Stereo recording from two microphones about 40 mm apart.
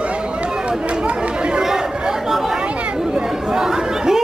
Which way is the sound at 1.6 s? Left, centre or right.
Centre.